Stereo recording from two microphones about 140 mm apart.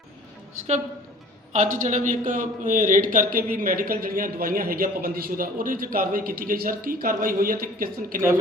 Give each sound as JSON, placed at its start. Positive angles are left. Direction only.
{"t": 1.5, "sound": "a man's voice", "side_deg": -65}